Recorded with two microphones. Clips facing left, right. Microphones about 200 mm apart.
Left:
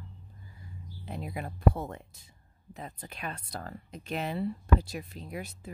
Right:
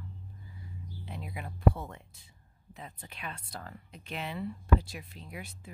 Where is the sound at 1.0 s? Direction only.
40° left (ahead or behind).